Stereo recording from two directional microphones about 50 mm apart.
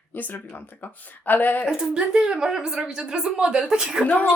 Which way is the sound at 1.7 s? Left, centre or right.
Centre.